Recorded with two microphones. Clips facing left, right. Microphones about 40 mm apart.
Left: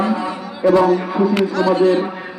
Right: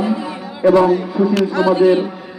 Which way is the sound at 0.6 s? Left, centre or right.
Centre.